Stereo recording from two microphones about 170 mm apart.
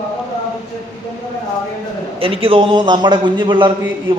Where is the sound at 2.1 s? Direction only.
30° right (ahead or behind).